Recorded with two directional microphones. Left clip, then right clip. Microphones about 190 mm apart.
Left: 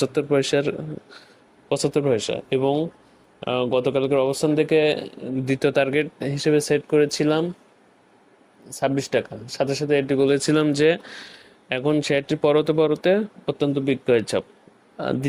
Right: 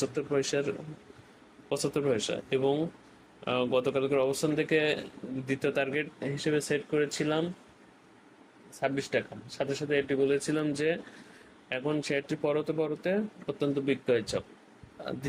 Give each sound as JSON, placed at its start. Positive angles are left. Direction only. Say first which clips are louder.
{"t": 0.0, "sound": "speech", "louder": "left 9 dB", "side_deg": 45}
{"t": 1.7, "sound": "speech", "louder": "left 8 dB", "side_deg": 35}
{"t": 8.8, "sound": "speech", "louder": "left 8 dB", "side_deg": 45}